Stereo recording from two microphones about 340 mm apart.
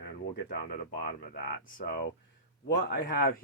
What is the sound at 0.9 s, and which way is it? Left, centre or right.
Speech, left.